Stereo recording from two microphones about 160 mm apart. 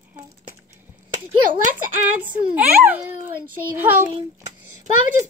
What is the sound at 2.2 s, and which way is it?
A child's voice, 10° right (ahead or behind).